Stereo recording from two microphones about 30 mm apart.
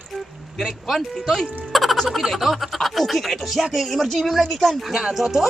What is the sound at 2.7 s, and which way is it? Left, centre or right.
Speech, centre.